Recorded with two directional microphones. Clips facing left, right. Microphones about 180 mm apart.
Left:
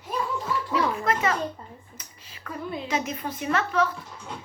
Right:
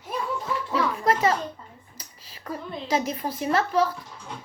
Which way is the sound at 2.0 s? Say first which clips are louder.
Right 2 dB; 35° right (ahead or behind).